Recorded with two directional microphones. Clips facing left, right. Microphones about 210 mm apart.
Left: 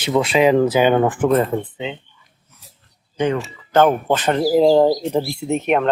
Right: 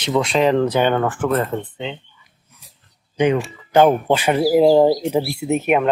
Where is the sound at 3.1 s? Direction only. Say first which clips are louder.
Right 3 dB; 15° right (ahead or behind).